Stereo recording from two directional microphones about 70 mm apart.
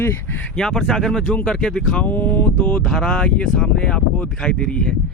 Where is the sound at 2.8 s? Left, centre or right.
Centre.